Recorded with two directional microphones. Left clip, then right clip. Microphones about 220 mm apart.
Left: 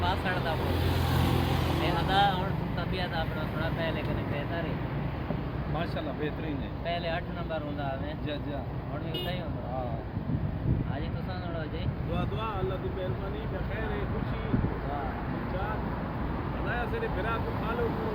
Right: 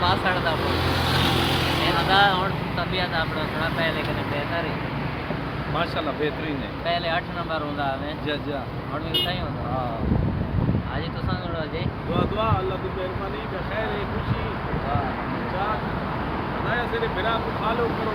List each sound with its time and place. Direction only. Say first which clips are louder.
0.0 s speech: right 8 dB; 5° left (ahead or behind)
1.1 s vehicle: right 9 dB; 35° right (ahead or behind)
2.0 s speech: right 7 dB; centre (ahead or behind)
6.8 s speech: right 8 dB; centre (ahead or behind)
12.1 s speech: right 11 dB; 10° left (ahead or behind)